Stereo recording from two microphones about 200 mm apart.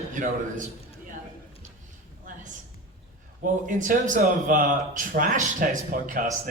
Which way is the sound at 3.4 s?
40° right (ahead or behind).